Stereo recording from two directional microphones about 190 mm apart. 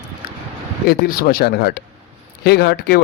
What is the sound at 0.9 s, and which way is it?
A man's voice, 50° left (ahead or behind).